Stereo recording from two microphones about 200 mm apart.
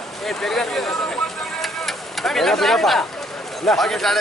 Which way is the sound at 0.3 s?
Centre (ahead or behind).